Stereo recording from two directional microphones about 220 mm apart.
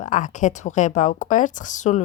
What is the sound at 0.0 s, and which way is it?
A woman's voice, 35° left (ahead or behind).